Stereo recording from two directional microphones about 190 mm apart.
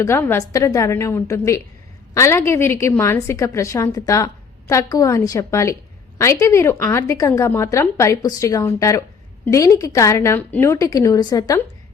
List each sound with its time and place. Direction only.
0.0 s speech: 10° left (ahead or behind)